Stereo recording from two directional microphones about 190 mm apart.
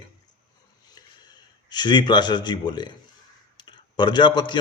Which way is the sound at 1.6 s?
25° left (ahead or behind).